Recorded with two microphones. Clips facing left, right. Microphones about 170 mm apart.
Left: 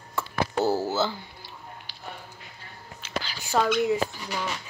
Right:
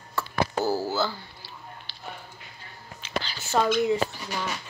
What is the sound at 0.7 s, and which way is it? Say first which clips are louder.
Speech: left 1 dB; 20° left (ahead or behind).